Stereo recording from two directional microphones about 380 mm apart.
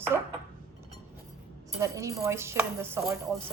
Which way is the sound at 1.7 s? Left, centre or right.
Centre.